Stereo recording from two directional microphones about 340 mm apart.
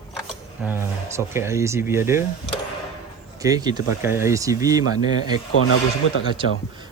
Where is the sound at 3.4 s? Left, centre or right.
Centre.